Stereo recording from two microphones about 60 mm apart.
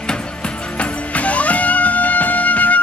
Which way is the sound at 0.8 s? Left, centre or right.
Left.